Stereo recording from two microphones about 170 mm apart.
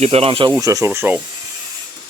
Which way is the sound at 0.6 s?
20° right (ahead or behind).